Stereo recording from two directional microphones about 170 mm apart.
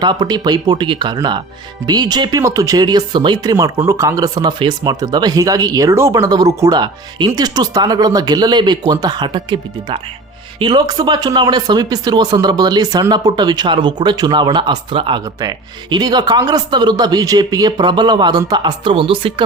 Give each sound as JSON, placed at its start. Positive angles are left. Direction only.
{"t": 0.0, "sound": "speech", "side_deg": -25}